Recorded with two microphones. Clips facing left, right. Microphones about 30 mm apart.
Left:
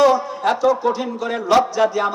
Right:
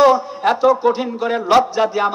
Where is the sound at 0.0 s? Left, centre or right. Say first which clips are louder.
Right 2 dB; right.